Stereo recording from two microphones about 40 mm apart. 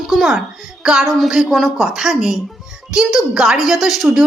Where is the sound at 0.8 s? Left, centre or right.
Centre.